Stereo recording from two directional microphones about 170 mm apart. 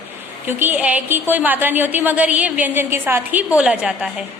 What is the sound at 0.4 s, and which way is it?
A woman's voice, 10° right (ahead or behind).